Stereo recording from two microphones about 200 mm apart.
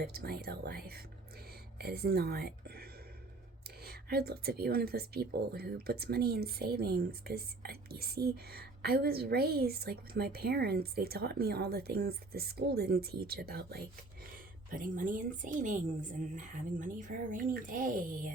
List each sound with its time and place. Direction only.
0.0 s speech: 50° right (ahead or behind)